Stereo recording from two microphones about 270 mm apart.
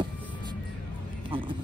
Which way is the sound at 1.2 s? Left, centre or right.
Centre.